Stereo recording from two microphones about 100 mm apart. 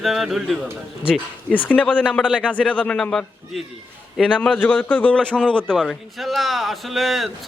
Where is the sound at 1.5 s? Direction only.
15° left (ahead or behind).